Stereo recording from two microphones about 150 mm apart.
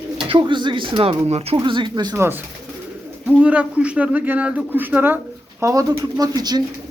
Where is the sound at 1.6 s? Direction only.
30° right (ahead or behind).